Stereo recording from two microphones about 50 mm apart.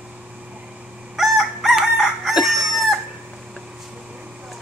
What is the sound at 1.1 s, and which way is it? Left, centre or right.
Chicken, centre.